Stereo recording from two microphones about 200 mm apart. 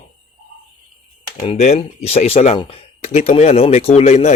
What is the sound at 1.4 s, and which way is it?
Speech, 30° left (ahead or behind).